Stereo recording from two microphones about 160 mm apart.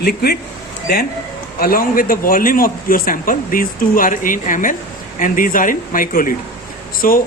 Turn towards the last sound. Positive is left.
turn(degrees=60)  # may be behind; listen again after turning